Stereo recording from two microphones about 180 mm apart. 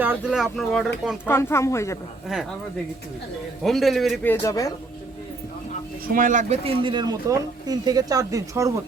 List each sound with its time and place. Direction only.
0.0 s speech: 5° right (ahead or behind)
1.2 s speech: 15° left (ahead or behind)
2.2 s speech: centre (ahead or behind)
3.6 s speech: centre (ahead or behind)
4.3 s speech: 20° left (ahead or behind)
6.1 s speech: 50° right (ahead or behind); by 8.8 s 15° right (ahead or behind)